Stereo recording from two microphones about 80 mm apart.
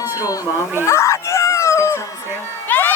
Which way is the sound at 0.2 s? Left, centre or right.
Left.